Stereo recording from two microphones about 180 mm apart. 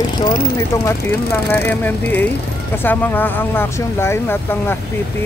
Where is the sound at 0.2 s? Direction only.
20° left (ahead or behind).